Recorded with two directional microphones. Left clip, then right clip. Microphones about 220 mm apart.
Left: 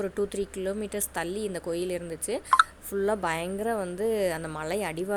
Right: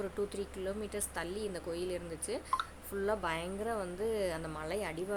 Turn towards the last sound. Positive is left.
turn(degrees=35)  # may be behind; listen again after turning